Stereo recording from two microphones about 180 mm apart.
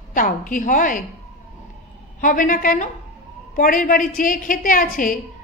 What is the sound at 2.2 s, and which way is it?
A woman's voice, 50° left (ahead or behind).